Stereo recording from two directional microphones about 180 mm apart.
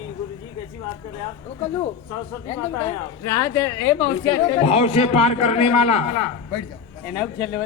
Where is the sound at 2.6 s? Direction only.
15° left (ahead or behind).